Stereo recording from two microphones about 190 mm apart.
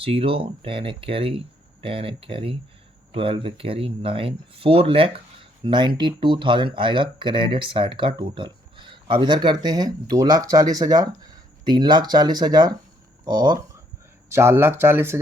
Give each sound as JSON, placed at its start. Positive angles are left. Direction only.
{"t": 0.0, "sound": "speech", "side_deg": -30}